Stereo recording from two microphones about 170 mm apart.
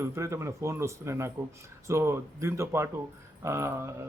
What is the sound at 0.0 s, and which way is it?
Speech, 15° right (ahead or behind).